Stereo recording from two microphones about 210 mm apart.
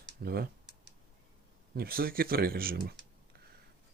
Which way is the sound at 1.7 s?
45° right (ahead or behind).